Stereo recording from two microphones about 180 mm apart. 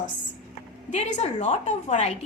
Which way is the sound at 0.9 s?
40° left (ahead or behind).